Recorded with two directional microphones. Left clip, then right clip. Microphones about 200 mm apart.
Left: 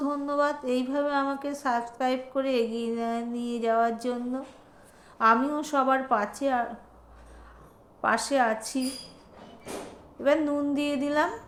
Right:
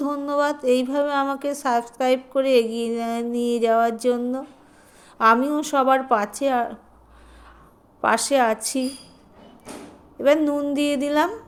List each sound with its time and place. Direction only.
0.0 s a woman's voice: 40° right (ahead or behind)
8.0 s a woman's voice: 45° right (ahead or behind)
10.2 s a woman's voice: 40° right (ahead or behind)